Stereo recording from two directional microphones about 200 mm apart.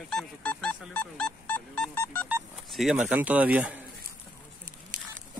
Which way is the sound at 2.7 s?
Centre (ahead or behind).